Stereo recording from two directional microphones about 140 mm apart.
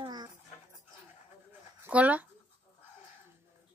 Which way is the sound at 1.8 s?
10° right (ahead or behind).